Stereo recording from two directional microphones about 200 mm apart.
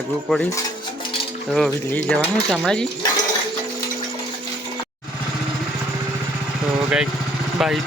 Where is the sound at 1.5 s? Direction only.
5° left (ahead or behind).